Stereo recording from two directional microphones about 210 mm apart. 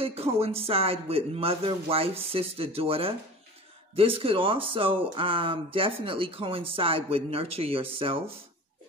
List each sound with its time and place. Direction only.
0.0 s speech: 30° right (ahead or behind)